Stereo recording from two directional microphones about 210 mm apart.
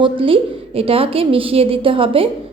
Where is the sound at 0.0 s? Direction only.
25° right (ahead or behind).